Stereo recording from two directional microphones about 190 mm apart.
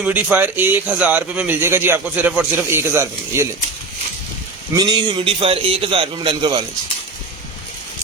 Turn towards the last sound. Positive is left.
turn(degrees=-25)  # may be behind; listen again after turning